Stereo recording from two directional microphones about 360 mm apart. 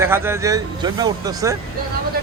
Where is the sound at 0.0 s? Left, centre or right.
Centre.